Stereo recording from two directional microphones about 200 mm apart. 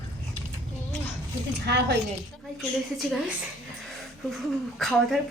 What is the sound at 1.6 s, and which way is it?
Speech, 55° right (ahead or behind).